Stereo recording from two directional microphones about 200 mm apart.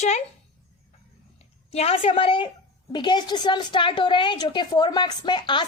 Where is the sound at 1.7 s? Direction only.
30° left (ahead or behind).